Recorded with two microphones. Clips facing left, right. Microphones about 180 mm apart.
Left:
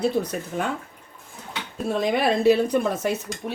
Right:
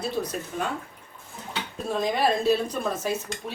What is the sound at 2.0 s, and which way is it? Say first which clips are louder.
Speech: left 2 dB; 65° left (ahead or behind).